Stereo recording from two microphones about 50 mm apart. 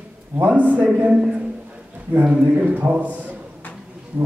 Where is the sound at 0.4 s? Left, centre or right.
Right.